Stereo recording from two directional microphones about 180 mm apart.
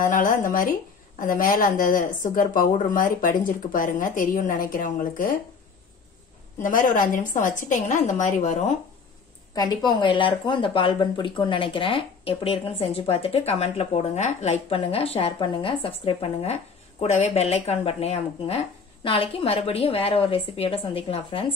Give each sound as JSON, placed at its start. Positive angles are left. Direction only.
{"t": 0.0, "sound": "a sound", "side_deg": 50}
{"t": 1.2, "sound": "speech", "side_deg": 50}
{"t": 6.6, "sound": "speech", "side_deg": 45}
{"t": 9.8, "sound": "speech", "side_deg": 25}